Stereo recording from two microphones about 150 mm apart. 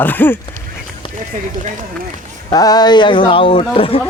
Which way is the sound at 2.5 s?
25° left (ahead or behind).